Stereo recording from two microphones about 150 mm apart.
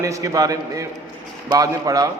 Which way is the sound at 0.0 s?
20° right (ahead or behind).